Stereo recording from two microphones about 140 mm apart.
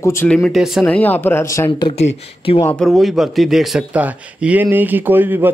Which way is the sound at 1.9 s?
45° left (ahead or behind).